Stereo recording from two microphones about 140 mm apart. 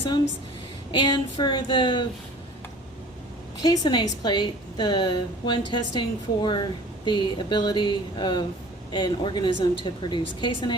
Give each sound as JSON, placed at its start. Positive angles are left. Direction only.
{"t": 0.9, "sound": "a woman's voice", "side_deg": 35}
{"t": 3.6, "sound": "a woman's voice", "side_deg": 30}